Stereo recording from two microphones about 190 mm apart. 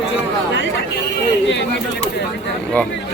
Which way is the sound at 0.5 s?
70° left (ahead or behind).